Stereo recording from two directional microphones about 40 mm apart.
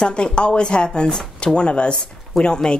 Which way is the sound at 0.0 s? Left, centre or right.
Left.